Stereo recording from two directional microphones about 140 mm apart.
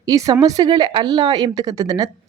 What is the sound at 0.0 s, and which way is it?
Speech, 25° right (ahead or behind).